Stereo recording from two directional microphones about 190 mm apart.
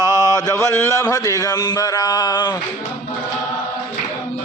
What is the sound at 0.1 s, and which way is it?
Speech, 20° left (ahead or behind).